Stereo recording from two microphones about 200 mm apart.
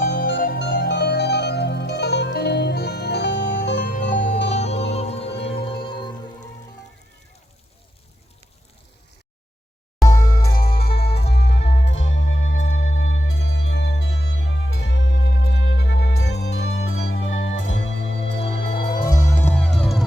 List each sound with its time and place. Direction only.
0.1 s music: 50° left (ahead or behind)
0.6 s music: 60° left (ahead or behind)
4.5 s music: 35° left (ahead or behind)
10.1 s music: 20° left (ahead or behind)
11.3 s music: 55° left (ahead or behind)
11.6 s music: 30° left (ahead or behind)
11.9 s music: 70° left (ahead or behind)
18.2 s music: 30° left (ahead or behind)
19.3 s music: 10° left (ahead or behind)